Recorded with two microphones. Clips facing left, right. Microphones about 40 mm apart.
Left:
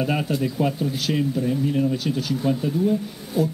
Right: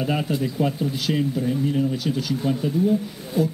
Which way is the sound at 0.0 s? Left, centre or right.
Centre.